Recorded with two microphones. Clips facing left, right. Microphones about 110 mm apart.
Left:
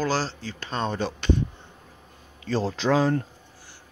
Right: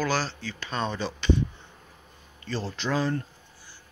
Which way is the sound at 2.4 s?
90° left.